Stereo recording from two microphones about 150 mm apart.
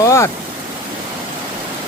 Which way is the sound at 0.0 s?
20° left (ahead or behind).